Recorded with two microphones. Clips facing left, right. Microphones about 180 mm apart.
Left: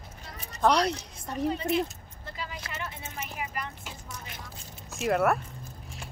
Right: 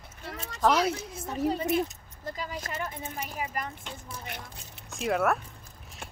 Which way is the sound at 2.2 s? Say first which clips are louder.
Right 4 dB; 45° right (ahead or behind).